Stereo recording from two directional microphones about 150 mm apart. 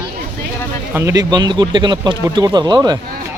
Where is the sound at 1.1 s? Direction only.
30° right (ahead or behind).